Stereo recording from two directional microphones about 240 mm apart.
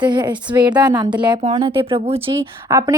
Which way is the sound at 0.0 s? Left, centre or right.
Centre.